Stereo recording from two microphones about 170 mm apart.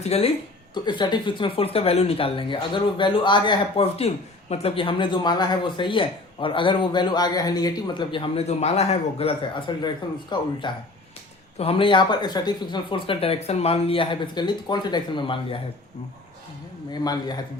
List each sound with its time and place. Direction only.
0.0 s speech: 35° left (ahead or behind)
16.9 s speech: 25° left (ahead or behind)